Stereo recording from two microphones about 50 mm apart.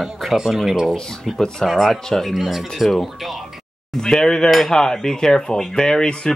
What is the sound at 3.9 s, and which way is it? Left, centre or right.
Speech, centre.